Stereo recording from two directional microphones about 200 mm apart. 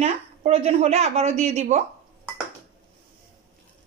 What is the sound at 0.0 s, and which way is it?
Speech, 30° right (ahead or behind).